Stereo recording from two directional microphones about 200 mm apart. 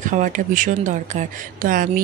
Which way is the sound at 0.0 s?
40° right (ahead or behind).